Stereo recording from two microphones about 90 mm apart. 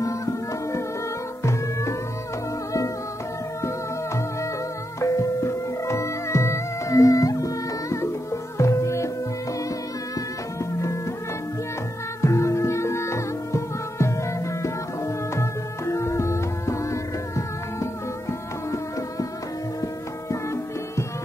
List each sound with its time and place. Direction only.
0.0 s music: 35° left (ahead or behind)
3.6 s music: 35° left (ahead or behind)
10.1 s music: 35° left (ahead or behind)
12.2 s music: 35° left (ahead or behind)
20.2 s music: 30° left (ahead or behind)